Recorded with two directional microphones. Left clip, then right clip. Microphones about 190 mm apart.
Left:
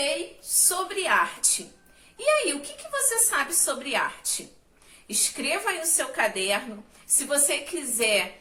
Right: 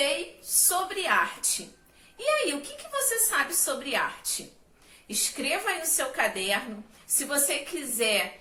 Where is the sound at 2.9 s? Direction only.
20° left (ahead or behind).